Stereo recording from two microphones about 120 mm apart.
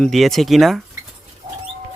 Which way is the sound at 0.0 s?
Centre (ahead or behind).